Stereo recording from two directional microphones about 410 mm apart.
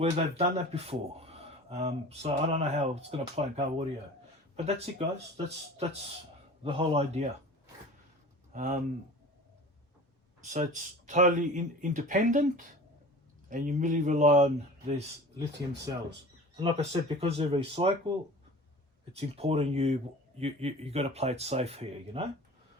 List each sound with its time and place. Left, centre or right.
0.0 s speech: centre
8.5 s speech: centre
10.5 s speech: centre
19.1 s speech: centre